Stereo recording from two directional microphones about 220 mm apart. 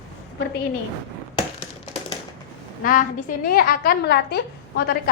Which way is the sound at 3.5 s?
40° left (ahead or behind).